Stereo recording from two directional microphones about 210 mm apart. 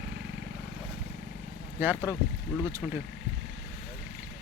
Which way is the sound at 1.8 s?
10° right (ahead or behind).